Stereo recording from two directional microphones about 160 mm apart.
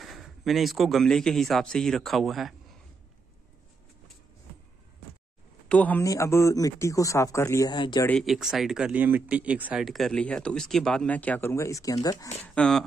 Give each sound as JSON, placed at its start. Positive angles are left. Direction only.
{"t": 0.0, "sound": "speech", "side_deg": 0}
{"t": 5.7, "sound": "a man's voice", "side_deg": 10}
{"t": 8.1, "sound": "speech", "side_deg": 0}
{"t": 12.4, "sound": "speech", "side_deg": 5}